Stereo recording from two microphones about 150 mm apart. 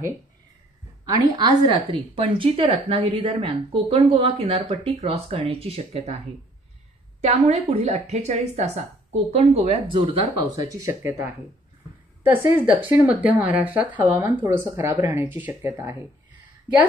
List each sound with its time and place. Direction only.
1.1 s a woman's voice: 30° right (ahead or behind)
7.2 s a woman's voice: 45° right (ahead or behind)
10.7 s speech: 20° right (ahead or behind)